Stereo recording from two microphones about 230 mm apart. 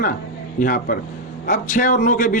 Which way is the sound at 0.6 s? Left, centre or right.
Left.